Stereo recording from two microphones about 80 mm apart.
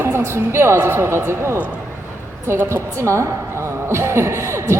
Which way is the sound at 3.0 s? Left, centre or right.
Right.